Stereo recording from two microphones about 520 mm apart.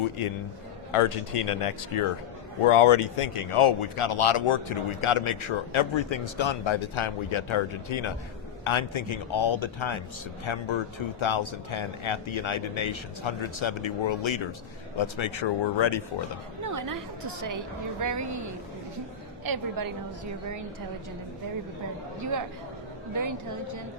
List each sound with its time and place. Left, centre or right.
0.9 s speech: left
16.6 s speech: right
19.5 s speech: right
22.2 s speech: right